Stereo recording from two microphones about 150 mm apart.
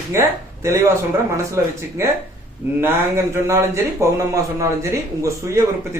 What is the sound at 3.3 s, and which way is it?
A man's voice, 20° right (ahead or behind).